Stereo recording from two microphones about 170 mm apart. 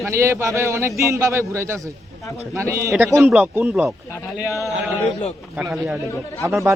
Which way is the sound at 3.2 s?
Centre (ahead or behind).